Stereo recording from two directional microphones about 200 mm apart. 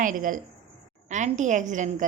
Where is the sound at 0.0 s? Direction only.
40° right (ahead or behind).